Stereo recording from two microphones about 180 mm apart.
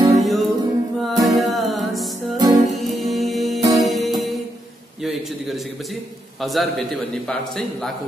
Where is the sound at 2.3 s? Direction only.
20° right (ahead or behind).